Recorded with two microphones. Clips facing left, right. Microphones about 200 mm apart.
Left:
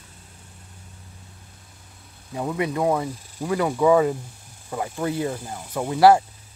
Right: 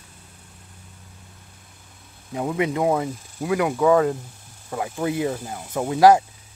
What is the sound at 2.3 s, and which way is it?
Speech, 15° right (ahead or behind).